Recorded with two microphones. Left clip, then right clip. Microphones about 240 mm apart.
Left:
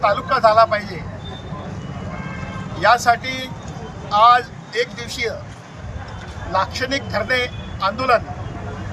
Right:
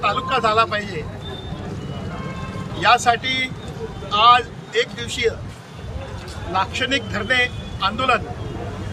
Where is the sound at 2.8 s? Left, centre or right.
Centre.